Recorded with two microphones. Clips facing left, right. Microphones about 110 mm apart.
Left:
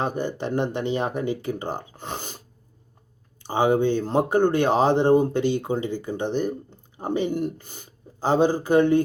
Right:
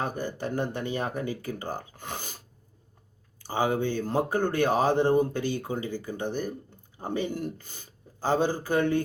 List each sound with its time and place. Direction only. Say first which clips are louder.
0.0 s speech: left 5 dB; 20° left (ahead or behind)
3.4 s speech: left 6 dB; 20° left (ahead or behind)